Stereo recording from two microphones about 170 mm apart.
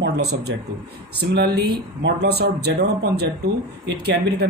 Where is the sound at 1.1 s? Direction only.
80° right.